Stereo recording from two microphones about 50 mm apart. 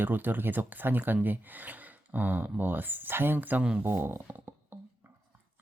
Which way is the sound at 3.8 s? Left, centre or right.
Right.